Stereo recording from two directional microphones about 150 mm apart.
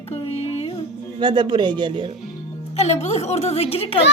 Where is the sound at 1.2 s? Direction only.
30° right (ahead or behind).